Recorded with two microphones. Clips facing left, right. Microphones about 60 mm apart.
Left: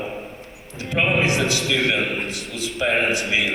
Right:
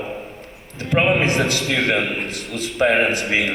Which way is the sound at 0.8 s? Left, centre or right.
Right.